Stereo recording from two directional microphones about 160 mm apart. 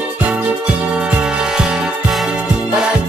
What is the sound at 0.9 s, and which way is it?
Music, 5° right (ahead or behind).